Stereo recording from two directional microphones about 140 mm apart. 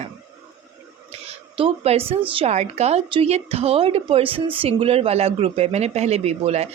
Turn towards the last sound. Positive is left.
turn(degrees=-50)  # may be behind; listen again after turning